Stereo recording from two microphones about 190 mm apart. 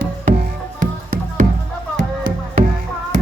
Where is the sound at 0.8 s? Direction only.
45° right (ahead or behind).